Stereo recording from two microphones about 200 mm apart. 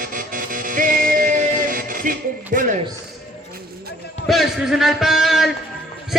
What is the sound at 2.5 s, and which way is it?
Speech, 40° right (ahead or behind).